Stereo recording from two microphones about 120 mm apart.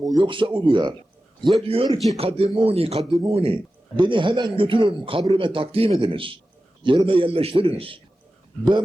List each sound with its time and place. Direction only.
0.0 s speech: 35° right (ahead or behind)
1.6 s speech: 50° right (ahead or behind)